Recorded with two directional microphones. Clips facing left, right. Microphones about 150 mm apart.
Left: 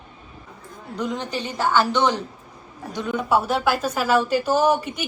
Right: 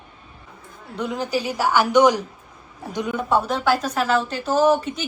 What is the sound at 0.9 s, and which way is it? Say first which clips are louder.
A woman's voice: right 2 dB; 5° right (ahead or behind).